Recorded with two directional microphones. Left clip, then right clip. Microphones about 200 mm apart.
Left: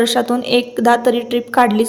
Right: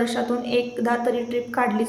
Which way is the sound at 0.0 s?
45° left (ahead or behind).